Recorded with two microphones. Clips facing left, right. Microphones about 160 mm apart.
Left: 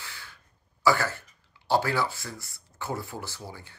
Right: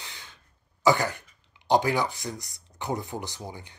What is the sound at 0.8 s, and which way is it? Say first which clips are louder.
Speech: right 2 dB; 15° right (ahead or behind).